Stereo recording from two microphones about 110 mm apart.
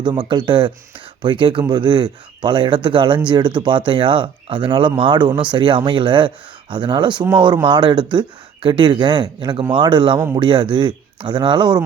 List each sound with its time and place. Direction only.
0.0 s speech: 45° right (ahead or behind)